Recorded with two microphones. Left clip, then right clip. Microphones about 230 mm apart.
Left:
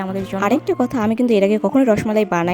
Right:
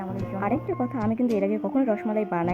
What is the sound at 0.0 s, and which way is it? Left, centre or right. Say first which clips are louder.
A woman's voice: left 9 dB; left.